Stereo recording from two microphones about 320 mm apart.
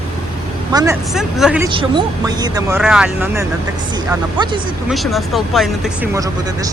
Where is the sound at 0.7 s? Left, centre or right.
Centre.